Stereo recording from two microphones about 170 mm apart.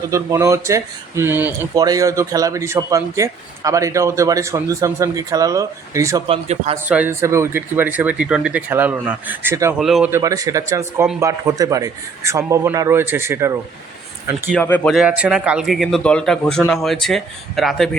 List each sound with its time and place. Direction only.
0.1 s speech: 15° right (ahead or behind)
1.7 s speech: 20° right (ahead or behind)
6.2 s a man's voice: 35° right (ahead or behind)
6.8 s speech: 10° right (ahead or behind)
9.7 s speech: 5° right (ahead or behind)
10.1 s speech: 20° right (ahead or behind)
14.5 s speech: 10° left (ahead or behind)
14.9 s speech: 5° right (ahead or behind)